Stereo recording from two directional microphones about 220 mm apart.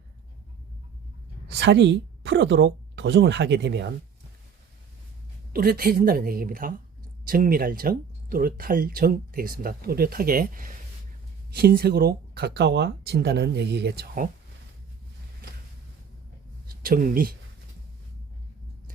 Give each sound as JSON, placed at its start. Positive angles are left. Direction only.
{"t": 1.5, "sound": "speech", "side_deg": -50}
{"t": 5.5, "sound": "speech", "side_deg": -45}
{"t": 16.6, "sound": "speech", "side_deg": -40}